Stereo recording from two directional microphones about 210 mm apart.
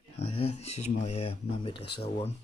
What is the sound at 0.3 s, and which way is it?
A man's voice, 30° left (ahead or behind).